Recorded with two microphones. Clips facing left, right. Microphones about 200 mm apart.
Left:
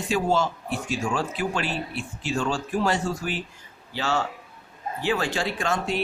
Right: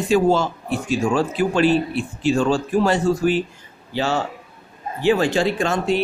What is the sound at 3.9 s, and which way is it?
Speech, 15° right (ahead or behind).